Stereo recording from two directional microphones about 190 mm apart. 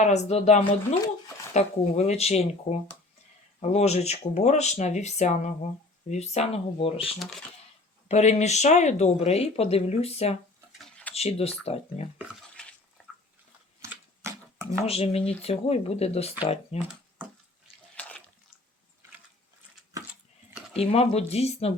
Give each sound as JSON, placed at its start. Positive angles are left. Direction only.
{"t": 0.0, "sound": "speech", "side_deg": 35}
{"t": 8.0, "sound": "speech", "side_deg": 35}
{"t": 10.7, "sound": "a sound", "side_deg": 5}
{"t": 11.1, "sound": "speech", "side_deg": 30}
{"t": 12.6, "sound": "bathtub", "side_deg": 5}
{"t": 13.8, "sound": "a sound", "side_deg": -15}
{"t": 14.8, "sound": "speech", "side_deg": 30}
{"t": 19.9, "sound": "dog", "side_deg": -20}
{"t": 20.5, "sound": "a sound", "side_deg": -5}
{"t": 20.7, "sound": "speech", "side_deg": 30}